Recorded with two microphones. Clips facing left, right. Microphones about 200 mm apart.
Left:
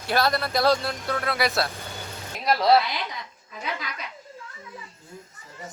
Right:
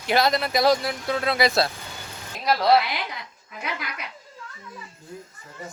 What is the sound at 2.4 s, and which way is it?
Speech, centre (ahead or behind).